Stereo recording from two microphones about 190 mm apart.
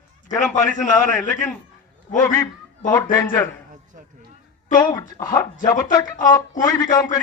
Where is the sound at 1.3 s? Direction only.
5° left (ahead or behind).